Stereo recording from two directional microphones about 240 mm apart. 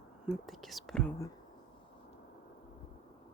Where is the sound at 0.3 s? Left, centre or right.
Centre.